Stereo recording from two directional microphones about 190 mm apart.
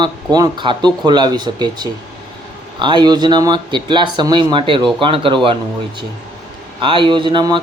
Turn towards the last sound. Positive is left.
turn(degrees=-25)  # may be behind; listen again after turning